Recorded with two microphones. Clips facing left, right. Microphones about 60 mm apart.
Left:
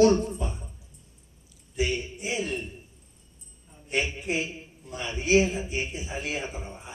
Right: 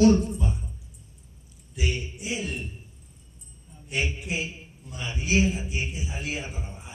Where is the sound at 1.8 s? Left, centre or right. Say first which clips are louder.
Left 3 dB; left.